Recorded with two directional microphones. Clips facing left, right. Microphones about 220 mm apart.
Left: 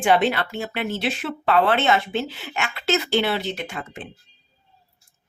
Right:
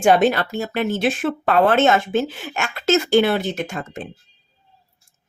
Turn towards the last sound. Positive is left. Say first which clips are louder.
# right 5 dB
turn(degrees=-45)  # may be behind; listen again after turning